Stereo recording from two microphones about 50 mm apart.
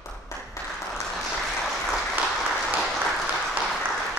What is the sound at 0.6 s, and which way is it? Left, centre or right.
Applause, left.